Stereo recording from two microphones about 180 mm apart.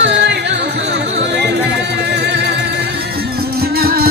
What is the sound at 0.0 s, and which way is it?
Music, 70° right (ahead or behind).